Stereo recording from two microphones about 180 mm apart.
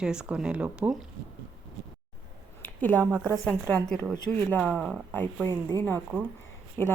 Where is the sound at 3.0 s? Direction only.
15° right (ahead or behind).